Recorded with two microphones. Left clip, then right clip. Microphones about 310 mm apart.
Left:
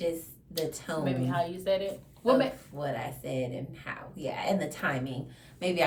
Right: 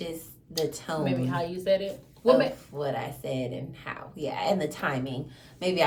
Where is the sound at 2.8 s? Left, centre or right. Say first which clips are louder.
Right 3 dB; centre.